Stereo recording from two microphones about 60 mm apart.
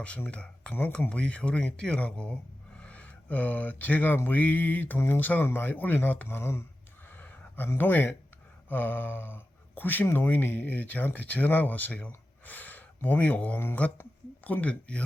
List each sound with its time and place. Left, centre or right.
0.3 s speech: centre
0.7 s speech: left
1.1 s speech: centre; by 6.7 s left
7.2 s a sound: left
7.8 s speech: left